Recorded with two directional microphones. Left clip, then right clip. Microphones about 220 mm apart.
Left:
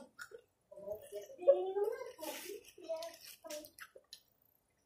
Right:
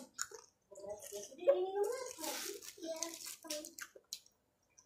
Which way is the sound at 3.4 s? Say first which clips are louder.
Right 1 dB; 40° right (ahead or behind).